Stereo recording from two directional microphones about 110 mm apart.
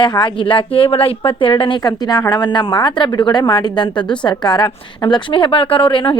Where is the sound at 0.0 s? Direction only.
45° left (ahead or behind).